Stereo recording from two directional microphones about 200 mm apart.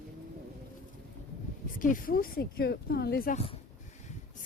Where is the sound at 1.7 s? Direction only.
45° left (ahead or behind).